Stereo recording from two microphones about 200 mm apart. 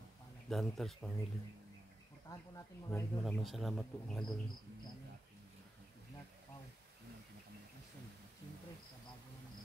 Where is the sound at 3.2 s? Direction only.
Centre (ahead or behind).